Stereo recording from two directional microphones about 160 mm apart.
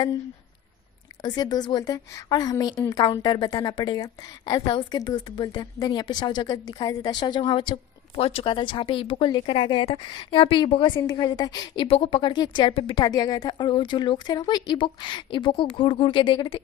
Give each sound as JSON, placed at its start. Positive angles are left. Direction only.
{"t": 1.2, "sound": "a woman's voice", "side_deg": 25}